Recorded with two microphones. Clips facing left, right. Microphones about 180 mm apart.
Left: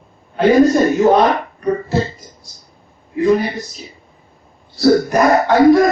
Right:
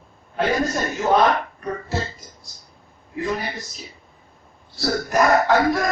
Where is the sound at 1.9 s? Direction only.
Centre (ahead or behind).